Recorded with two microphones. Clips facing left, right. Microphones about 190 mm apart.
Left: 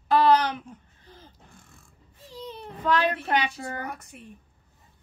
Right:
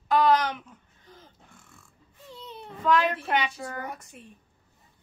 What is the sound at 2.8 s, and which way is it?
Speech, 35° left (ahead or behind).